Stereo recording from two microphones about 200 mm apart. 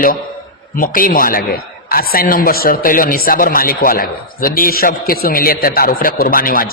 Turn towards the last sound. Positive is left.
turn(degrees=45)  # may be behind; listen again after turning